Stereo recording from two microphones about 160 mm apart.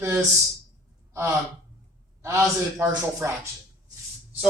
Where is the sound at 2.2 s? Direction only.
15° right (ahead or behind).